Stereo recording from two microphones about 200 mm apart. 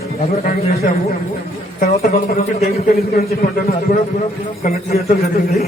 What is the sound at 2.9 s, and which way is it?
Speech, 50° left (ahead or behind).